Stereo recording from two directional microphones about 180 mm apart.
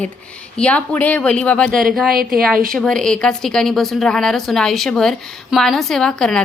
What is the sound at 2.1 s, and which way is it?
Speech, 50° right (ahead or behind).